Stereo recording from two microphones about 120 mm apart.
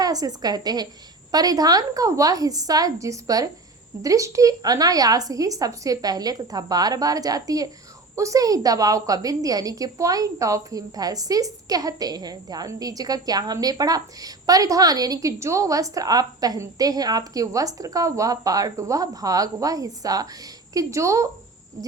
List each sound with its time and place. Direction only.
0.0 s a woman's voice: 30° right (ahead or behind)